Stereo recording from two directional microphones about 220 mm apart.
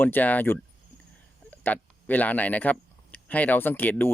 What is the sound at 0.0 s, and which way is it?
Speech, 10° left (ahead or behind).